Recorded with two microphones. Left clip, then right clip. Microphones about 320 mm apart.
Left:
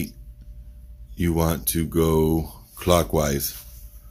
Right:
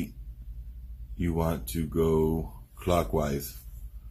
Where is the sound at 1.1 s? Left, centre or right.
Left.